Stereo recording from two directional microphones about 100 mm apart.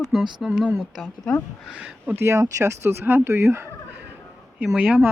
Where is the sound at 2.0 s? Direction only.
20° right (ahead or behind).